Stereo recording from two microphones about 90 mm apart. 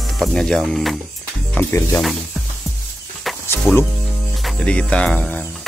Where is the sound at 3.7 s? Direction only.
25° left (ahead or behind).